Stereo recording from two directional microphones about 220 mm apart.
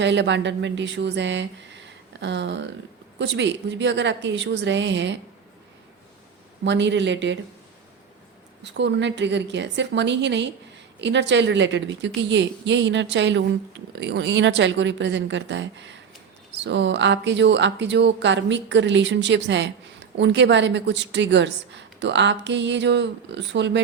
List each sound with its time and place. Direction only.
0.0 s speech: 55° right (ahead or behind)
6.7 s speech: 55° right (ahead or behind)
8.6 s a woman's voice: 50° right (ahead or behind)